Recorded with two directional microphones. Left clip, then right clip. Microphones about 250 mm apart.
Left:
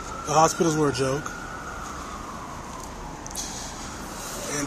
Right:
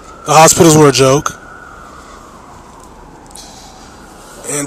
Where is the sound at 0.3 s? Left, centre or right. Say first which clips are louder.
Right 14 dB; right.